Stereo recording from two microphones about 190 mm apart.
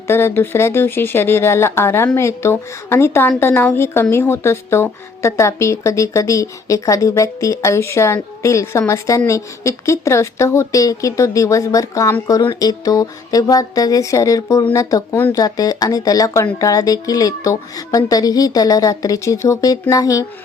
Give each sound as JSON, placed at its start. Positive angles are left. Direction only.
{"t": 0.1, "sound": "speech", "side_deg": 10}